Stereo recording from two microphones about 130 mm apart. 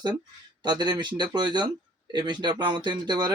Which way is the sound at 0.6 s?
35° right (ahead or behind).